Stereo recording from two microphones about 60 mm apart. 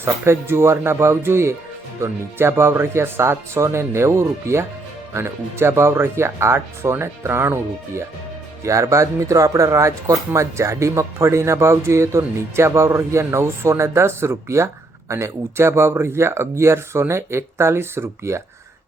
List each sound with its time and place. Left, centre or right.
0.0 s speech: right
8.6 s speech: right